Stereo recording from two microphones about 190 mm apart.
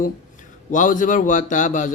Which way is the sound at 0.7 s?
45° left (ahead or behind).